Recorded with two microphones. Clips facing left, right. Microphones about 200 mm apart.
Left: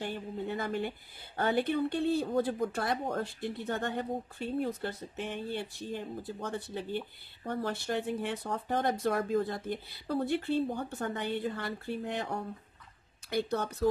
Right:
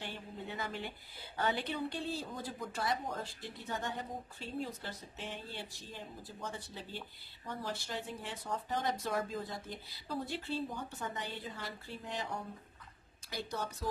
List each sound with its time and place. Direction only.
0.0 s speech: 50° left (ahead or behind)